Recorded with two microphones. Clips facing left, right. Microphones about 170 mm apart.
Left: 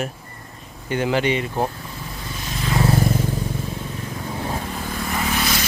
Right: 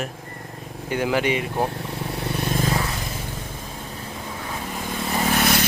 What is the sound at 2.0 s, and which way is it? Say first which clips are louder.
Vehicle: right 8 dB; 65° right (ahead or behind).